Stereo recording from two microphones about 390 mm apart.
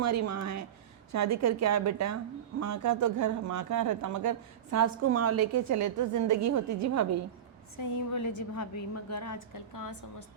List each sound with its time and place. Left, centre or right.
0.0 s a woman's voice: right
7.8 s a woman's voice: left